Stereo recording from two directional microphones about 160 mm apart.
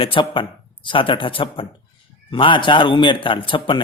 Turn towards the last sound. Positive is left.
turn(degrees=30)  # may be behind; listen again after turning